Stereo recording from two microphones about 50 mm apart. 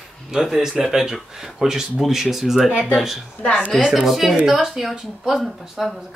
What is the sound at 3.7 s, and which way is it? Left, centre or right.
Speech, centre.